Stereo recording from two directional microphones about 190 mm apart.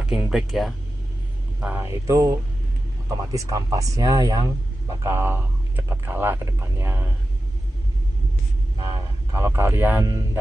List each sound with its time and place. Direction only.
0.0 s speech: 5° right (ahead or behind)
8.8 s speech: 15° right (ahead or behind)